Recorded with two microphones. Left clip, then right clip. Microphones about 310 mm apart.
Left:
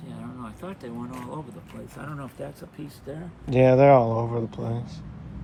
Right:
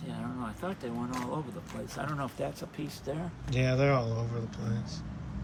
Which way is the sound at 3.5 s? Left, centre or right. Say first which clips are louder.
Left 13 dB; centre.